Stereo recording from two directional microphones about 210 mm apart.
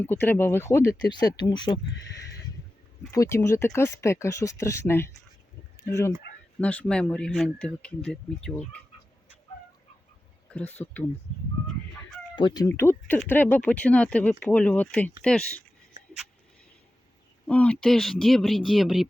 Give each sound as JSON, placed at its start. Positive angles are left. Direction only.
{"t": 0.0, "sound": "speech", "side_deg": 10}
{"t": 3.1, "sound": "speech", "side_deg": 15}
{"t": 10.5, "sound": "speech", "side_deg": 10}
{"t": 12.4, "sound": "speech", "side_deg": 20}
{"t": 17.4, "sound": "speech", "side_deg": 5}